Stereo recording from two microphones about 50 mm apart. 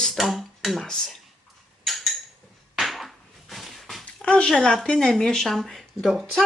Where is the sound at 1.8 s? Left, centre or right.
Centre.